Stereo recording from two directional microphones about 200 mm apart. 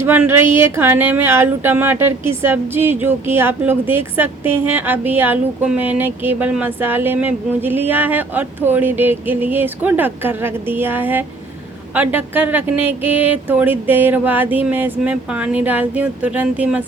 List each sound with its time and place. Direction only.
0.0 s speech: 10° right (ahead or behind)